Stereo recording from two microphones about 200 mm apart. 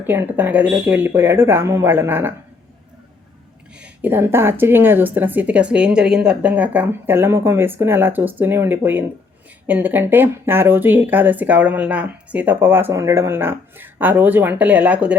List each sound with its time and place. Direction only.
0.0 s speech: 10° right (ahead or behind)
3.8 s speech: 5° right (ahead or behind)